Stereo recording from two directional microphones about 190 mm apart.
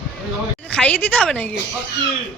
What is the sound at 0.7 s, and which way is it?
Speech, 10° left (ahead or behind).